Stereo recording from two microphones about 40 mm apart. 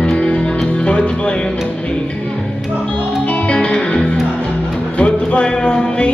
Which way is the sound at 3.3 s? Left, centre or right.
Left.